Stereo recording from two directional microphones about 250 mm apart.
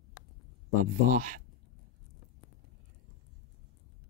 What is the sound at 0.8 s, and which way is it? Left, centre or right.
Speech, right.